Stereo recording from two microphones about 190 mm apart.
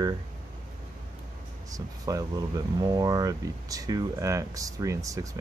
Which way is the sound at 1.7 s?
20° right (ahead or behind).